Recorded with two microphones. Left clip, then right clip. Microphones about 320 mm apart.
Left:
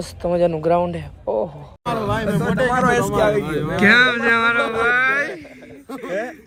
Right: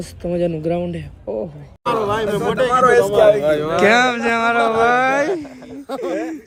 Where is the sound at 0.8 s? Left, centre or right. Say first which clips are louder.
Left 3 dB; left.